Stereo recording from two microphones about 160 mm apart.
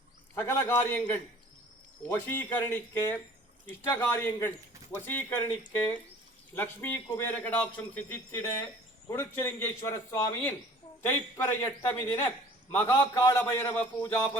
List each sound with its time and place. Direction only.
0.3 s a man's voice: 15° left (ahead or behind)